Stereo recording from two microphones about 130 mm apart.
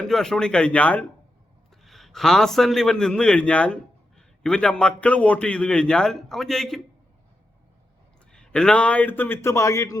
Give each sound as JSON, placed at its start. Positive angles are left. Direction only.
{"t": 0.0, "sound": "a man's voice", "side_deg": 5}
{"t": 1.7, "sound": "a man's voice", "side_deg": 0}
{"t": 8.3, "sound": "a man's voice", "side_deg": 5}